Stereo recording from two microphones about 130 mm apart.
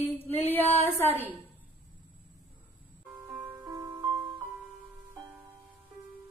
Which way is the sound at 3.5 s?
25° right (ahead or behind).